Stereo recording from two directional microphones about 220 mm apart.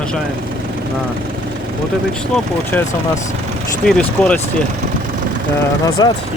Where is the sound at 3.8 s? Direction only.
5° left (ahead or behind).